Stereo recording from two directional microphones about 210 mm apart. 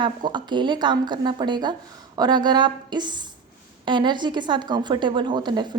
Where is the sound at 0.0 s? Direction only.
20° right (ahead or behind).